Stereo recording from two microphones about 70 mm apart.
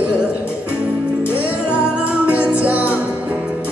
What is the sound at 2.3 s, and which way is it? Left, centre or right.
Music, centre.